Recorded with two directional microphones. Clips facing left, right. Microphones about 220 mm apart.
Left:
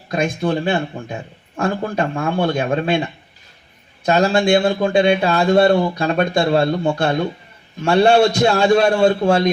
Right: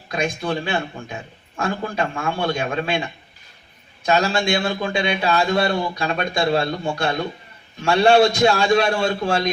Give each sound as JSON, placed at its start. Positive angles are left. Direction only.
{"t": 0.1, "sound": "a man's voice", "side_deg": 45}
{"t": 2.1, "sound": "speech", "side_deg": 40}
{"t": 4.0, "sound": "a man's voice", "side_deg": 50}
{"t": 5.9, "sound": "a man's voice", "side_deg": 40}